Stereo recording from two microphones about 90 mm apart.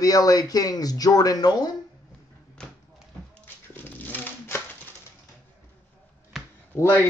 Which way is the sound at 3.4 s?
20° left (ahead or behind).